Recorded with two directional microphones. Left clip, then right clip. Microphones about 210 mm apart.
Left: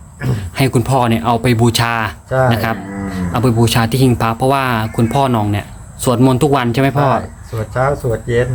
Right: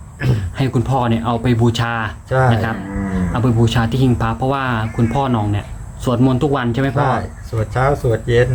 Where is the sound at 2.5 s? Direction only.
45° left (ahead or behind).